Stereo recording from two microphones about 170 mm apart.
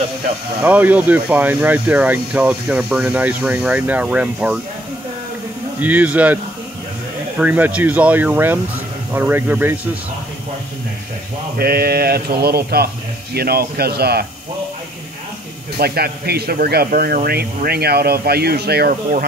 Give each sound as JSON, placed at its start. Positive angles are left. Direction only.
{"t": 0.7, "sound": "speech", "side_deg": -10}
{"t": 5.8, "sound": "speech", "side_deg": -10}
{"t": 11.5, "sound": "speech", "side_deg": -65}
{"t": 15.8, "sound": "speech", "side_deg": -70}